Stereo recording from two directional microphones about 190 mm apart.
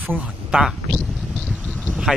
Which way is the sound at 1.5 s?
Centre (ahead or behind).